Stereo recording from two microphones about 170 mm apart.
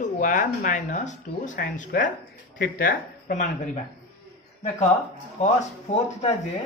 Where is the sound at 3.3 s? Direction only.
50° left (ahead or behind).